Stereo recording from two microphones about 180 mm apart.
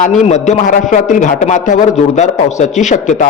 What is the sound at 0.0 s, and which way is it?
Speech, 40° left (ahead or behind).